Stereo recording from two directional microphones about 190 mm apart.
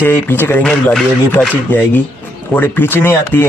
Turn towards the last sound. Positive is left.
turn(degrees=10)  # may be behind; listen again after turning